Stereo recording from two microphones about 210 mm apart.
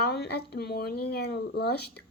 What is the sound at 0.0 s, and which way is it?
Speech, 50° left (ahead or behind).